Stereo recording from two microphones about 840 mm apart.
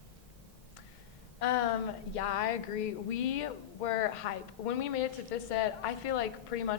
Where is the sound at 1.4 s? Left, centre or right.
Left.